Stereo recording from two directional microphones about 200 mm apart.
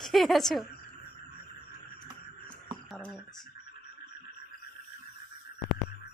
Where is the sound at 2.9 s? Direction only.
5° left (ahead or behind).